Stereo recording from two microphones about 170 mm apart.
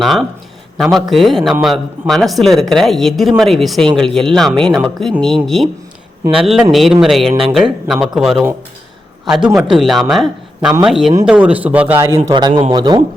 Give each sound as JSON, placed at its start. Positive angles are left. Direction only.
{"t": 0.0, "sound": "a man's voice", "side_deg": 0}
{"t": 12.3, "sound": "a man's voice", "side_deg": -25}